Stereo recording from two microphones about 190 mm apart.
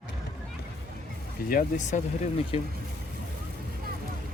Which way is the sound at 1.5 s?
40° left (ahead or behind).